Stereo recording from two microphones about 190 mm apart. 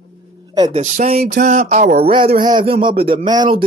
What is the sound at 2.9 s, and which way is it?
Speech, 50° right (ahead or behind).